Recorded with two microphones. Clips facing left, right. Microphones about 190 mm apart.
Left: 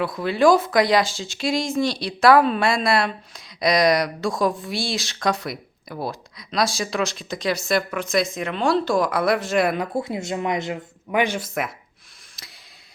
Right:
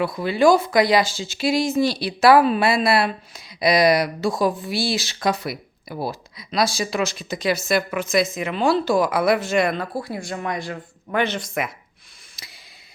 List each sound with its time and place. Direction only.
0.0 s speech: centre (ahead or behind)
9.7 s speech: 20° left (ahead or behind); by 11.7 s centre (ahead or behind)
12.4 s a sound: centre (ahead or behind)